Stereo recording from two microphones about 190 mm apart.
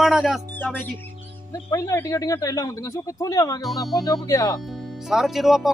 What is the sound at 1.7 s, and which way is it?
Speech, 15° left (ahead or behind).